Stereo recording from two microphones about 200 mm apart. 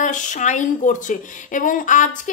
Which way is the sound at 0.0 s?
40° left (ahead or behind).